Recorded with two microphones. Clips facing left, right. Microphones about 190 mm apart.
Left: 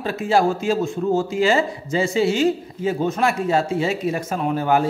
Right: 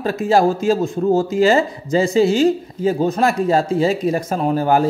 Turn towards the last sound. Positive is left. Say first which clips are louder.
# right 3 dB
turn(degrees=-40)  # may be behind; listen again after turning